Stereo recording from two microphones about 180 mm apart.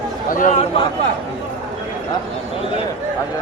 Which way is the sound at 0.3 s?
45° left (ahead or behind).